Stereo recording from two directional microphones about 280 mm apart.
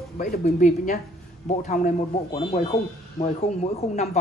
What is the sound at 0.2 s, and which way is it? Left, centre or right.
Speech, left.